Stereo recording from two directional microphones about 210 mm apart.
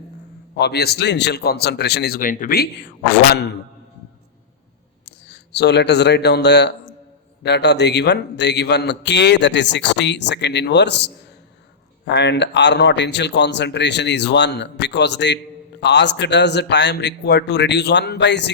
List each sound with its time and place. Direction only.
0.5 s a man's voice: 50° left (ahead or behind)
3.3 s a man's voice: 55° left (ahead or behind)
5.0 s a man's voice: 55° left (ahead or behind)